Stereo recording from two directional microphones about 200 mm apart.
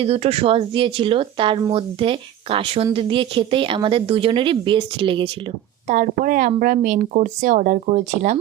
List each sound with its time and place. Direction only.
0.0 s speech: 30° right (ahead or behind)
5.9 s speech: 45° right (ahead or behind)